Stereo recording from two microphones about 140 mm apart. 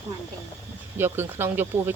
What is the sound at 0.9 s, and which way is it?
Speech, 15° right (ahead or behind).